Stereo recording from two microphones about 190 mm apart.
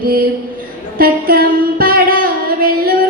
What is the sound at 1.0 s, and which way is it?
Singing, 50° right (ahead or behind).